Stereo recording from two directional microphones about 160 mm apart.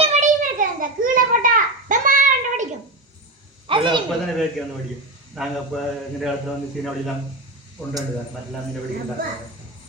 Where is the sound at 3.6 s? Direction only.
30° right (ahead or behind).